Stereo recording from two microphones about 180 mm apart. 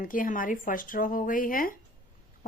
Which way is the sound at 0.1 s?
50° left (ahead or behind).